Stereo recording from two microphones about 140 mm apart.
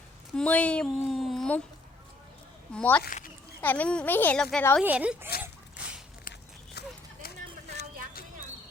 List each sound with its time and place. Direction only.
0.3 s speech: 10° left (ahead or behind)
2.7 s speech: 15° left (ahead or behind)
3.1 s a child's voice: 75° left (ahead or behind)
3.6 s speech: 10° left (ahead or behind)
4.8 s speech: 10° right (ahead or behind)
5.4 s a sound: 10° right (ahead or behind)